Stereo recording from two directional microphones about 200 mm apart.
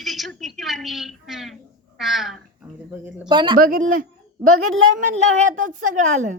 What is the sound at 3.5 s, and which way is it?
Speech, 45° right (ahead or behind).